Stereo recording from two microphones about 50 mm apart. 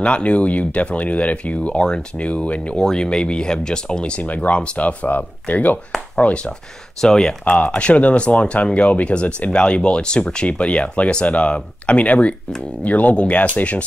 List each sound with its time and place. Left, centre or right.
0.0 s speech: left
2.8 s speech: centre
4.2 s speech: left
7.4 s speech: left